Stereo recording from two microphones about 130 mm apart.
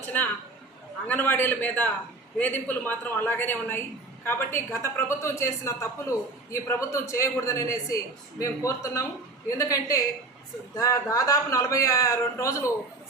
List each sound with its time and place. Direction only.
0.1 s a man's voice: 15° left (ahead or behind)